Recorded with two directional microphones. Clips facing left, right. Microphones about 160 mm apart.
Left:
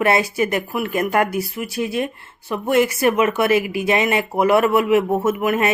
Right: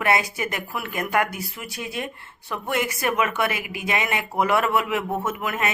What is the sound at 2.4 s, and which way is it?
Speech, 20° left (ahead or behind).